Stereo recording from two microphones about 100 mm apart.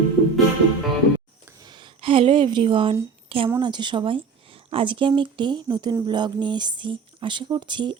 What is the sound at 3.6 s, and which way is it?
A woman's voice, 45° right (ahead or behind).